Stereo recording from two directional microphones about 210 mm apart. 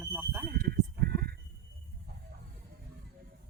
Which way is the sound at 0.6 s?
50° right (ahead or behind).